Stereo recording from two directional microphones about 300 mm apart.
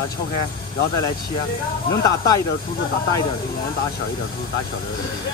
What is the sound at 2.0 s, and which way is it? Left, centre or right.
Speech, centre.